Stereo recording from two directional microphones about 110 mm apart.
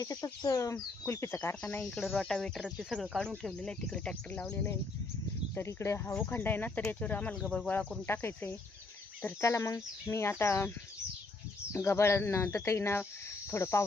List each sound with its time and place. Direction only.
0.0 s speech: 35° left (ahead or behind)
1.6 s speech: 10° left (ahead or behind)
2.6 s speech: 5° right (ahead or behind)
7.7 s speech: 15° left (ahead or behind)
11.7 s speech: 25° left (ahead or behind)